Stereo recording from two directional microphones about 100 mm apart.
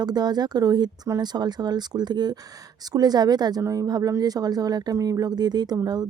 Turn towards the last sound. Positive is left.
turn(degrees=-40)  # may be behind; listen again after turning